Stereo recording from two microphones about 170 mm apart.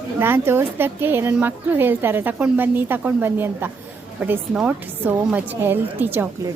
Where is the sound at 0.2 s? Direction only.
15° right (ahead or behind).